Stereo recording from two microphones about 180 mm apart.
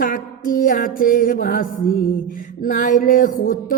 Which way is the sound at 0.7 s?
50° left (ahead or behind).